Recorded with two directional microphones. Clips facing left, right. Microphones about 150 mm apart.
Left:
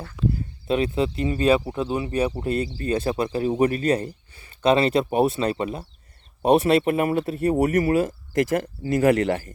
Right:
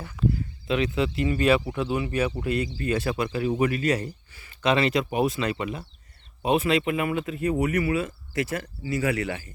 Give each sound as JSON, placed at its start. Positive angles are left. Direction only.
{"t": 0.7, "sound": "speech", "side_deg": 35}